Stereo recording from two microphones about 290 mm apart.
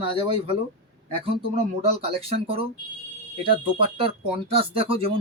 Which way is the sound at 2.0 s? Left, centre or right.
Centre.